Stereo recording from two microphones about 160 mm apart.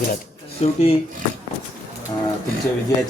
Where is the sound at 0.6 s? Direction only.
40° left (ahead or behind).